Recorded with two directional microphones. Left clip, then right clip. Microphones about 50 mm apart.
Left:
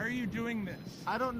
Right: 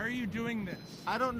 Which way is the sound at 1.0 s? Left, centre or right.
Right.